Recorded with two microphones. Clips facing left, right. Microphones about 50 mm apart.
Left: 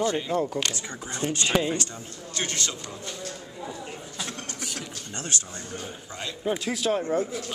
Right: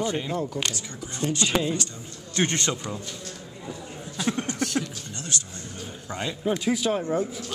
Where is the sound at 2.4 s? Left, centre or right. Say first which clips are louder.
Right 6 dB; right.